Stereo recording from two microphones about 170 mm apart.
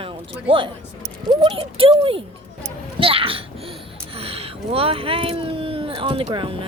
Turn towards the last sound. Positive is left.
turn(degrees=-30)  # may be behind; listen again after turning